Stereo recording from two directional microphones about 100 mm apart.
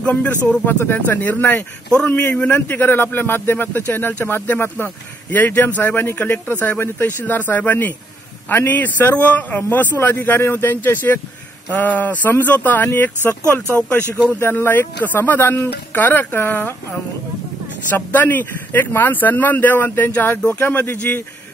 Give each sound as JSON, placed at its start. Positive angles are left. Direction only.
{"t": 0.0, "sound": "a man's voice", "side_deg": 15}
{"t": 14.1, "sound": "a man's voice", "side_deg": 20}
{"t": 17.9, "sound": "a man's voice", "side_deg": 20}